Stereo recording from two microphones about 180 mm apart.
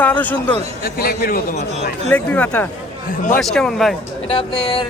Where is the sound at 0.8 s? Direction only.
55° left (ahead or behind).